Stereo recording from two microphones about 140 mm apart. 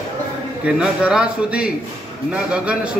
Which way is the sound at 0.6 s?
5° right (ahead or behind).